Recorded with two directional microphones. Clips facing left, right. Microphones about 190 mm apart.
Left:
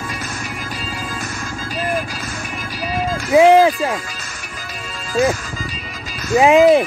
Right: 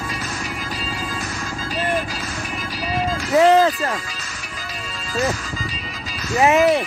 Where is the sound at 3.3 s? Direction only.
10° left (ahead or behind).